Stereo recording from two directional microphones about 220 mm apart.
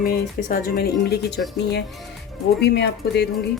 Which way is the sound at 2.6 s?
50° left (ahead or behind).